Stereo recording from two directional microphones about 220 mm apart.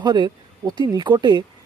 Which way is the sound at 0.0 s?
20° right (ahead or behind).